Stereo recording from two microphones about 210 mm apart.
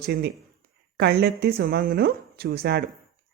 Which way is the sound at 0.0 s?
50° right (ahead or behind).